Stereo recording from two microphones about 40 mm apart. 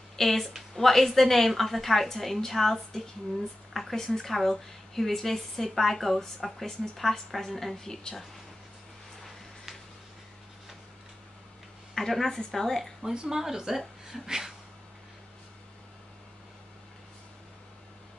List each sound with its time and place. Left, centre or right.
0.1 s a woman's voice: centre
11.9 s speech: centre
13.0 s a woman's voice: centre